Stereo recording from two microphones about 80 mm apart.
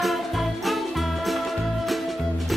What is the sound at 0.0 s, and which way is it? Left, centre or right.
Music, centre.